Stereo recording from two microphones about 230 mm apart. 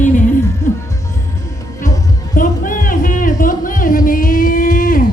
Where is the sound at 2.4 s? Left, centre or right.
Left.